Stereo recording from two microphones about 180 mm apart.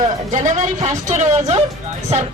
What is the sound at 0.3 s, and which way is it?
Speech, 40° right (ahead or behind).